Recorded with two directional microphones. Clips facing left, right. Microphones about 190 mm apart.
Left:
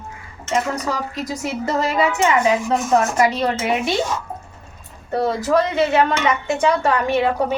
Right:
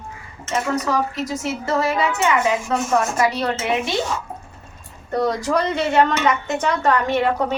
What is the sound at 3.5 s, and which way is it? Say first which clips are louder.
A woman's voice: left 2 dB; 10° left (ahead or behind).